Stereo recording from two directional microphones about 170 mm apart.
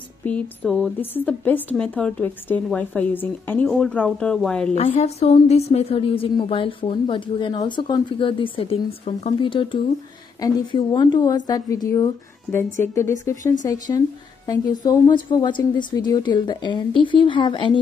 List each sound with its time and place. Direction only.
0.2 s a woman's voice: 10° left (ahead or behind)
4.7 s a woman's voice: 40° left (ahead or behind)